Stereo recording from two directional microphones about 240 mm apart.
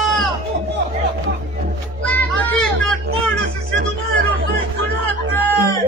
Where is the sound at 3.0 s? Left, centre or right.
Right.